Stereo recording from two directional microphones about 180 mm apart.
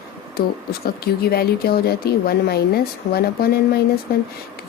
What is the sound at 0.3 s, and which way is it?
Speech, 55° left (ahead or behind).